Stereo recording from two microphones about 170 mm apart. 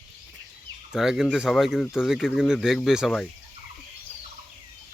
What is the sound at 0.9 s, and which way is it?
Speech, centre (ahead or behind).